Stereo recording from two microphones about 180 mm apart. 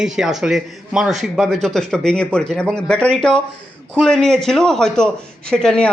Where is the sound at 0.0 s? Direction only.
5° right (ahead or behind).